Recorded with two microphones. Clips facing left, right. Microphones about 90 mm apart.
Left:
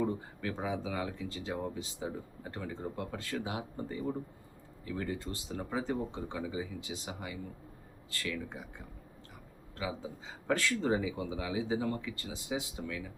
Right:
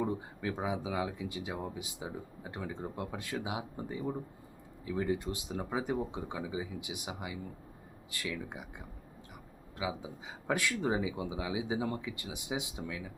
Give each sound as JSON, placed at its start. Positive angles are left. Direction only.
{"t": 0.0, "sound": "speech", "side_deg": -15}
{"t": 9.7, "sound": "speech", "side_deg": -15}